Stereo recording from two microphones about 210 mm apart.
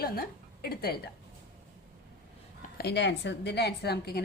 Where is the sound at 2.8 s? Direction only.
55° left (ahead or behind).